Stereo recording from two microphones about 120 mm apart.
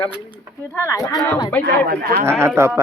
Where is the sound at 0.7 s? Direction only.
25° left (ahead or behind).